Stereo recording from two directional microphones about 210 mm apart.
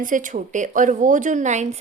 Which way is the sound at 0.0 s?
40° right (ahead or behind).